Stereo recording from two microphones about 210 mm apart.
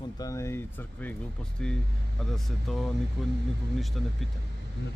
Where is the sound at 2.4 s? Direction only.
Centre (ahead or behind).